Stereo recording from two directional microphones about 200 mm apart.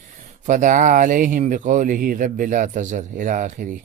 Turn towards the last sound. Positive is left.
turn(degrees=-40)  # may be behind; listen again after turning